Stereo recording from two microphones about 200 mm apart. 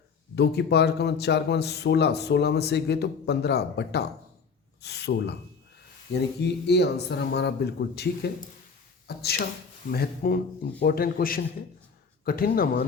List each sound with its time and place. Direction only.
0.3 s a man's voice: 55° left (ahead or behind)